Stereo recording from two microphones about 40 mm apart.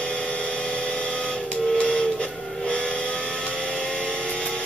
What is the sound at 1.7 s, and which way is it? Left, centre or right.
Music, left.